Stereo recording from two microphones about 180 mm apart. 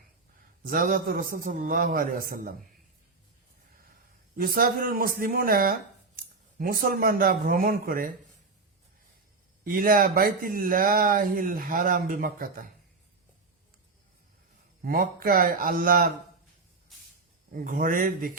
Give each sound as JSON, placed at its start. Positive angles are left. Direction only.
{"t": 0.7, "sound": "speech", "side_deg": -50}
{"t": 4.4, "sound": "speech", "side_deg": -55}
{"t": 6.8, "sound": "speech", "side_deg": -55}
{"t": 9.6, "sound": "speech", "side_deg": -50}
{"t": 14.8, "sound": "speech", "side_deg": -55}
{"t": 17.5, "sound": "speech", "side_deg": -50}